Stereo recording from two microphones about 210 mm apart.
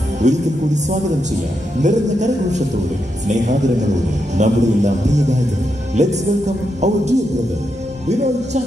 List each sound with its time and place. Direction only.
0.2 s speech: 35° right (ahead or behind)